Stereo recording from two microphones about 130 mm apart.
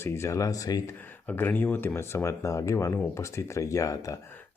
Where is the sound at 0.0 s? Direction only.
20° left (ahead or behind).